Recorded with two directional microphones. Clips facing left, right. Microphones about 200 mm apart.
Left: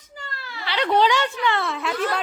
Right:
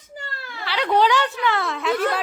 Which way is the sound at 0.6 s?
5° right (ahead or behind).